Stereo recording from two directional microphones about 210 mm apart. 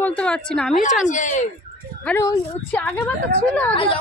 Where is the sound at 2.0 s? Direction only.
5° left (ahead or behind).